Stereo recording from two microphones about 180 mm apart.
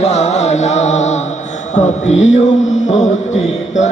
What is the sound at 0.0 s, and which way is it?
Music, 35° left (ahead or behind).